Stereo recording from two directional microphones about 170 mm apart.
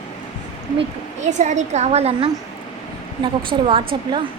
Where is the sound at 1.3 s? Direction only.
45° right (ahead or behind).